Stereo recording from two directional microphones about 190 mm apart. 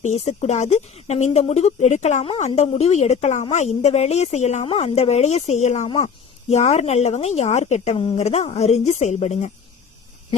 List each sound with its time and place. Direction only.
0.0 s a woman's voice: 35° left (ahead or behind)